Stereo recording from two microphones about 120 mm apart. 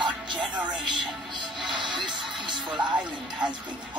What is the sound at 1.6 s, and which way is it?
Music, 40° right (ahead or behind).